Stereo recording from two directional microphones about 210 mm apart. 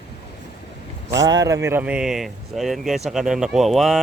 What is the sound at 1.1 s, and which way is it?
Speech, 15° right (ahead or behind).